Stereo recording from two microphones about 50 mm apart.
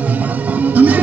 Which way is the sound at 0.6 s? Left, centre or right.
Right.